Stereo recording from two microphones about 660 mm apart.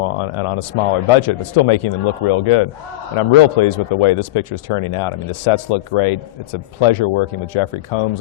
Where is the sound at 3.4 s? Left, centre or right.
Left.